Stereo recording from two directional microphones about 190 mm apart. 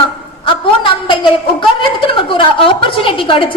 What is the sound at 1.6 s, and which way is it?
A woman's voice, 25° left (ahead or behind).